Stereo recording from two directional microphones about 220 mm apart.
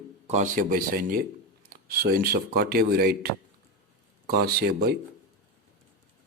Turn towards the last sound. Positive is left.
turn(degrees=-45)  # may be behind; listen again after turning